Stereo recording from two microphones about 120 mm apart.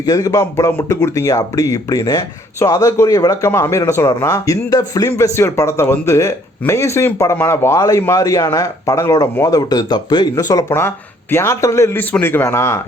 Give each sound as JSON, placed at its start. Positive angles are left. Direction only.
{"t": 0.0, "sound": "speech", "side_deg": 30}
{"t": 5.0, "sound": "speech", "side_deg": 20}
{"t": 10.7, "sound": "speech", "side_deg": 20}